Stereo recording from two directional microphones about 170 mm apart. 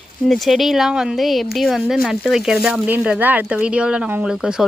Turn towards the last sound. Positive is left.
turn(degrees=-5)  # may be behind; listen again after turning